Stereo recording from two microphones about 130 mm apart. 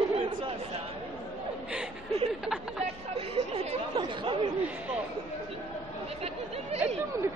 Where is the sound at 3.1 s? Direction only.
50° right (ahead or behind).